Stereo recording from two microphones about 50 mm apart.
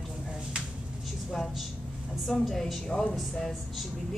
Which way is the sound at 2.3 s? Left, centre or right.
Centre.